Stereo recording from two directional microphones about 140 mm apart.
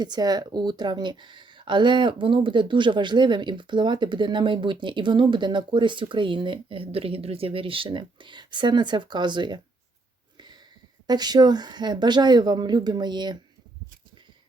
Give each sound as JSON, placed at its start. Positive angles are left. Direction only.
{"t": 0.0, "sound": "speech", "side_deg": -30}
{"t": 10.3, "sound": "a sound", "side_deg": -30}
{"t": 11.0, "sound": "speech", "side_deg": -30}